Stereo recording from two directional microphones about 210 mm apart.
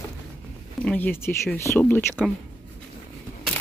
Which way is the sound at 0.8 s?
10° left (ahead or behind).